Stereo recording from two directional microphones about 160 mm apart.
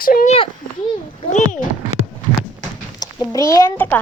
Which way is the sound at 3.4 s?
20° left (ahead or behind).